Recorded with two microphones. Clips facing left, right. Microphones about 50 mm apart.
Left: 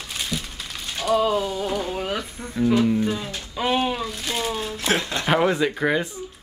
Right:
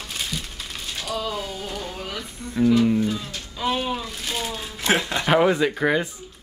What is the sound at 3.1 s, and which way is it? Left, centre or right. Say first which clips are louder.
Speech: left 1 dB; left.